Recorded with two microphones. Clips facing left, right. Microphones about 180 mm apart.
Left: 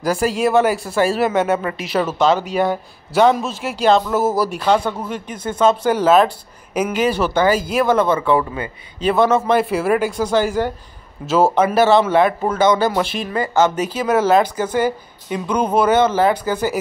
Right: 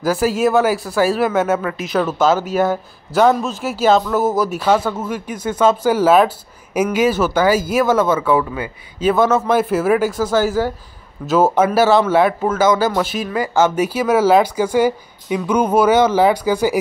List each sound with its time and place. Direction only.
0.0 s speech: centre (ahead or behind)